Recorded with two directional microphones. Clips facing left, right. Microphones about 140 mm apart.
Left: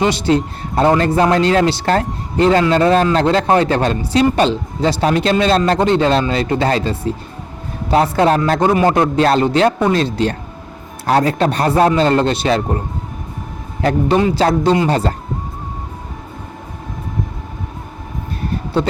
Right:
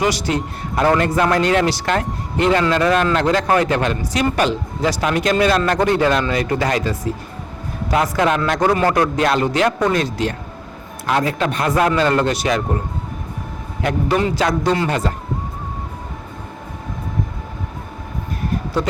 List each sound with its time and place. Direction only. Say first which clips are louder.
0.0 s a man's voice: left 4 dB; 25° left (ahead or behind)
13.8 s a man's voice: left 4 dB; 25° left (ahead or behind)